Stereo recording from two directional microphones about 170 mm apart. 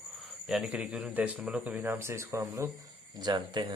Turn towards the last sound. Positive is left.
turn(degrees=-25)  # may be behind; listen again after turning